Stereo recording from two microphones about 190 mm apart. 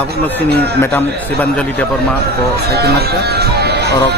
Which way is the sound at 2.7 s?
55° right (ahead or behind).